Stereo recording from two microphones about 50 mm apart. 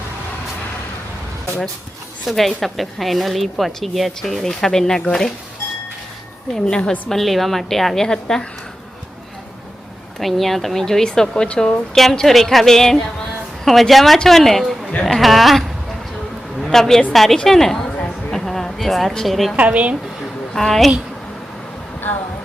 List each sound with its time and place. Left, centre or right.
2.2 s a woman's voice: centre
6.5 s speech: centre
7.1 s a woman's voice: centre
10.2 s speech: centre; by 11.8 s left
11.9 s a woman's voice: centre
16.7 s a woman's voice: centre
18.3 s a sound: centre
19.5 s speech: right
20.5 s a woman's voice: centre